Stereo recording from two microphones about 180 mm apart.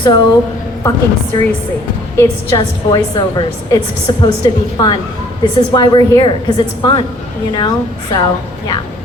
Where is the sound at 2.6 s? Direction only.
25° left (ahead or behind).